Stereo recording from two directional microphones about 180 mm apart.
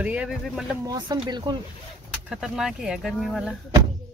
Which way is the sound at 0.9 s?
25° right (ahead or behind).